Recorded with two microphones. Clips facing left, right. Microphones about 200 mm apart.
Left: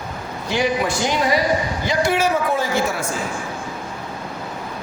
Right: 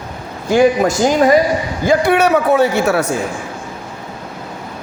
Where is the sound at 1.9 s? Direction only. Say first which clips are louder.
Right 7 dB; 60° right (ahead or behind).